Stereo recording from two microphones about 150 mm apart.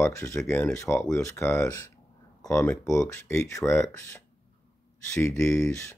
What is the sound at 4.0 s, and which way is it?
Speech, 20° left (ahead or behind).